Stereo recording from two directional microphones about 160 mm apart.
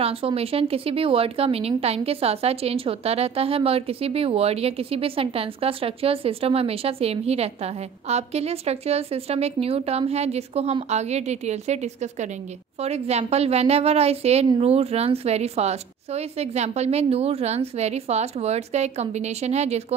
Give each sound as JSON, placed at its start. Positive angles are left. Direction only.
{"t": 0.0, "sound": "speech", "side_deg": -35}